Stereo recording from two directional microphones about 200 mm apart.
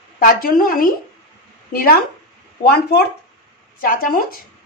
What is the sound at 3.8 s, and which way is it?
Speech, 45° left (ahead or behind).